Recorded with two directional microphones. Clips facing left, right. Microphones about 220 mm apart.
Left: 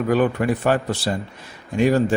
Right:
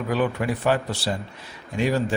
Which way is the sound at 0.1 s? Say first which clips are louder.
Left 4 dB; 50° left (ahead or behind).